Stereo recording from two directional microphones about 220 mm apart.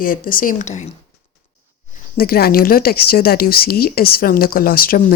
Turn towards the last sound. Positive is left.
turn(degrees=40)  # may be behind; listen again after turning